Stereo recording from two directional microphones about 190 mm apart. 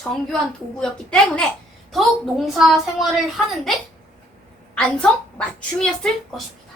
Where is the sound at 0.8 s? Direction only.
5° left (ahead or behind).